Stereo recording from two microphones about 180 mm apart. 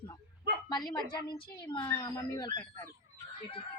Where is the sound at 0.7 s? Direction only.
25° left (ahead or behind).